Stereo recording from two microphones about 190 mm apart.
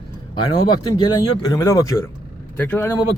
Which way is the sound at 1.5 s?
15° left (ahead or behind).